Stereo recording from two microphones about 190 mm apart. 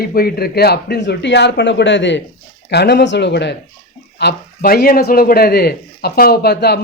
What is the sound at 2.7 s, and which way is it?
A man's voice, 60° left (ahead or behind).